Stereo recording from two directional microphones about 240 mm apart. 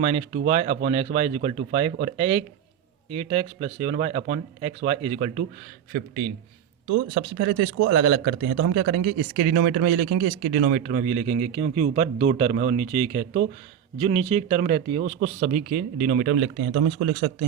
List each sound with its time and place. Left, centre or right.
0.0 s speech: right
5.9 s speech: right
16.3 s speech: right